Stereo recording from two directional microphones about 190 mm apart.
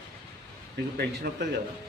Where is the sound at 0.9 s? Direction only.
55° right (ahead or behind).